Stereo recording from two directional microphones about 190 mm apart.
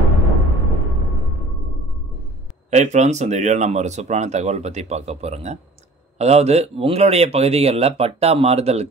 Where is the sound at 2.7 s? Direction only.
35° right (ahead or behind).